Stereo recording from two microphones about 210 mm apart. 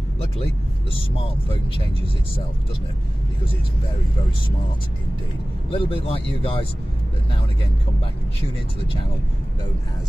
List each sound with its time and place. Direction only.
0.9 s speech: 25° left (ahead or behind)
5.7 s speech: 25° left (ahead or behind)